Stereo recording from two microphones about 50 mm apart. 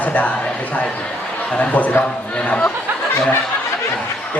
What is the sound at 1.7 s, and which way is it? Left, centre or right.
Speech, left.